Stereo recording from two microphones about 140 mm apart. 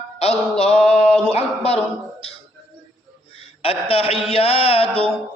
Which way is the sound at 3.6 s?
45° left (ahead or behind).